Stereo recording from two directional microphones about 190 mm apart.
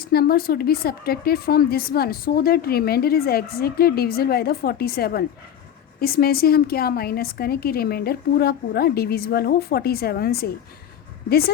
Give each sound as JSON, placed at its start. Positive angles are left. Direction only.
{"t": 0.0, "sound": "a woman's voice", "side_deg": 55}